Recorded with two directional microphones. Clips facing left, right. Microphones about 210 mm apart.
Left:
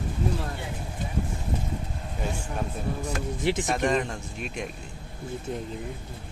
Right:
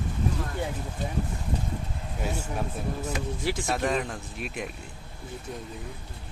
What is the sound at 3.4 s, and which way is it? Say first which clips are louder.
Speech: left 6 dB; 20° left (ahead or behind).